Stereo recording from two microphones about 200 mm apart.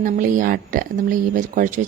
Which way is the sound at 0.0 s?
40° right (ahead or behind).